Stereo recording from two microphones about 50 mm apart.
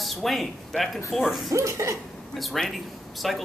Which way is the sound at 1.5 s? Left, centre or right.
Right.